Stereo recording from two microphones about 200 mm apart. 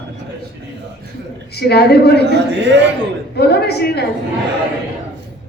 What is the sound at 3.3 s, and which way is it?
Speech, 55° left (ahead or behind).